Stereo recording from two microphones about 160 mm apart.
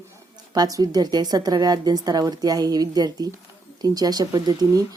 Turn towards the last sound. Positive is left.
turn(degrees=-25)  # may be behind; listen again after turning